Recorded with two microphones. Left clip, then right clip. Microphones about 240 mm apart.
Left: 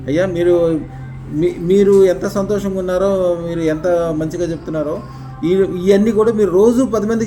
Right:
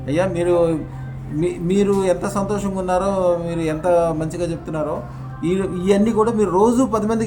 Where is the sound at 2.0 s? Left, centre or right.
Right.